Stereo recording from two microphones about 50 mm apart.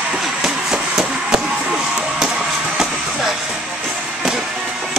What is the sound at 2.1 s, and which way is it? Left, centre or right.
Chop, centre.